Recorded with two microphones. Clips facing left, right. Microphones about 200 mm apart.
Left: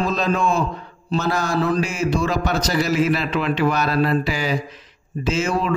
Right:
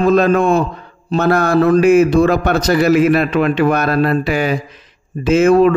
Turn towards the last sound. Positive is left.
turn(degrees=-55)  # may be behind; listen again after turning